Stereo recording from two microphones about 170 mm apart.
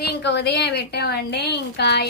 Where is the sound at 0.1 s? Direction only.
90° left.